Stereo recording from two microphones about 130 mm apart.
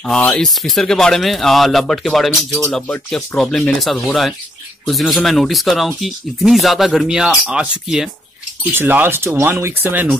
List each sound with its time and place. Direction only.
0.0 s speech: 10° left (ahead or behind); by 10.0 s 20° right (ahead or behind)